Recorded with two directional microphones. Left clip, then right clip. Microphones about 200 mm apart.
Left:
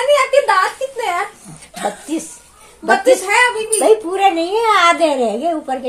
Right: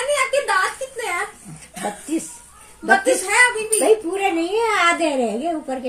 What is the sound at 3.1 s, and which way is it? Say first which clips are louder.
Speech: left 2 dB; 15° right (ahead or behind).